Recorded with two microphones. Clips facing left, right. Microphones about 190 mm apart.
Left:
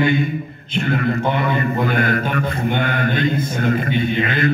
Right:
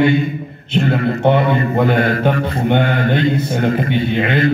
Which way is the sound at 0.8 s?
30° right (ahead or behind).